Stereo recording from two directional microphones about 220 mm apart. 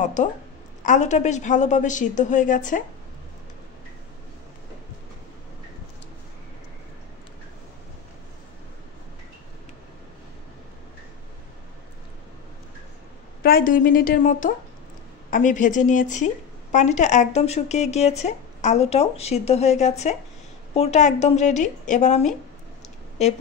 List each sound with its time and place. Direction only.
0.0 s a woman's voice: 35° left (ahead or behind)
13.4 s a woman's voice: 45° left (ahead or behind)